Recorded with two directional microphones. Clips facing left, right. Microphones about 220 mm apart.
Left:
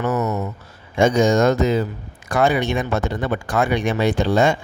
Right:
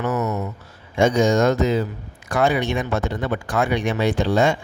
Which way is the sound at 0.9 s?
45° left (ahead or behind).